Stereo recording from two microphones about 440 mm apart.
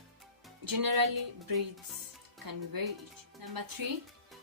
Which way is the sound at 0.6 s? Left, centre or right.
Right.